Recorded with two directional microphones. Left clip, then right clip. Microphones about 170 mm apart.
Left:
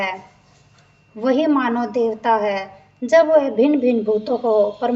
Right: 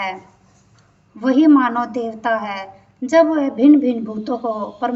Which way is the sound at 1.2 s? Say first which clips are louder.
Right 4 dB; 45° left (ahead or behind).